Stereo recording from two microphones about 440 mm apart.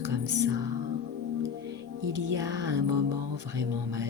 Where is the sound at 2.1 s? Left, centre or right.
Right.